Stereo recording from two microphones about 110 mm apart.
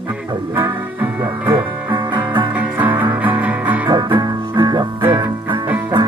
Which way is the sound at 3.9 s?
40° right (ahead or behind).